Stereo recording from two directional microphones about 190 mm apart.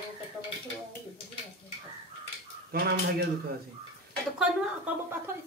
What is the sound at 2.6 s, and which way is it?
Speech, 55° right (ahead or behind).